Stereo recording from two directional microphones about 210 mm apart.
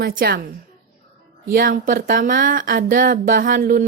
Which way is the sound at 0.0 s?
45° right (ahead or behind).